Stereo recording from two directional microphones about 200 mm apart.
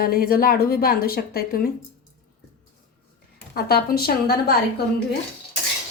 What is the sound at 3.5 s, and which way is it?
A woman's voice, 50° left (ahead or behind).